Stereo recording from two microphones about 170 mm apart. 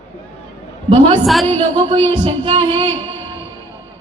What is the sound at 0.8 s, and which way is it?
A woman's voice, 30° right (ahead or behind).